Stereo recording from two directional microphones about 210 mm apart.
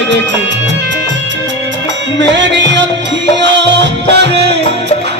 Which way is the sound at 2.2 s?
55° right (ahead or behind).